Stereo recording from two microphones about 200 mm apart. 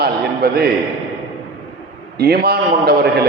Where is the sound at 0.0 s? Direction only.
50° right (ahead or behind).